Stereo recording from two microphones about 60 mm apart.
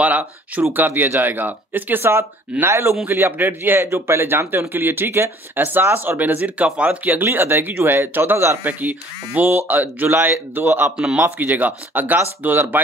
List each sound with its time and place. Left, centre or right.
0.0 s speech: right
2.6 s speech: right
7.1 s speech: right